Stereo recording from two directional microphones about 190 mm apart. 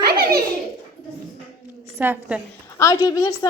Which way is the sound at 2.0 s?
10° right (ahead or behind).